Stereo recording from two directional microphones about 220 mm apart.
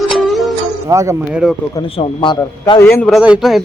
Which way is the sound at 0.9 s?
15° right (ahead or behind).